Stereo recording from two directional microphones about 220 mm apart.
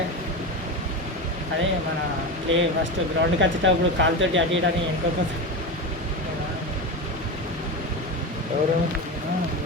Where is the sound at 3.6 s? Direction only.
60° right (ahead or behind).